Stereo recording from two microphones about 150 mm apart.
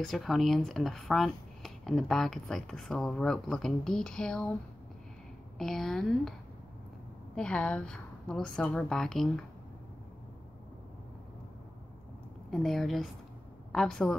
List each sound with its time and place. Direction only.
0.0 s speech: centre (ahead or behind)
5.6 s speech: centre (ahead or behind)
7.3 s speech: 10° left (ahead or behind)
12.4 s a woman's voice: centre (ahead or behind)